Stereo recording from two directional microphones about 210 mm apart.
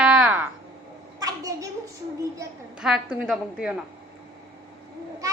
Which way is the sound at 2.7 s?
Centre (ahead or behind).